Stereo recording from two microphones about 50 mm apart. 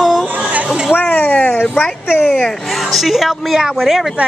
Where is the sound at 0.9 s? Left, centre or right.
Left.